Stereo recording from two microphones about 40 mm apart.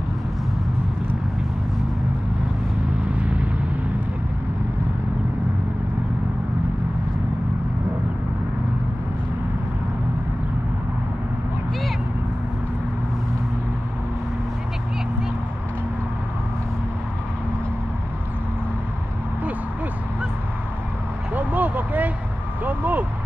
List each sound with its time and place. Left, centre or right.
3.2 s vehicle: right
21.4 s vehicle: right